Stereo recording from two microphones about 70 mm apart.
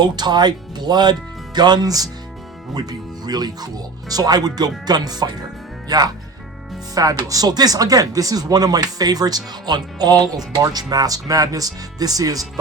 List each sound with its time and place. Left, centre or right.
0.0 s speech: right
3.2 s speech: right
6.9 s speech: right